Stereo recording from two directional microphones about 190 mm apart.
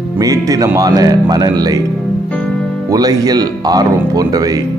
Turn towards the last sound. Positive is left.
turn(degrees=-20)  # may be behind; listen again after turning